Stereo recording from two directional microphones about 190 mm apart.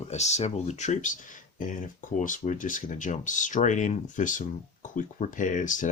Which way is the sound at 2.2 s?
40° left (ahead or behind).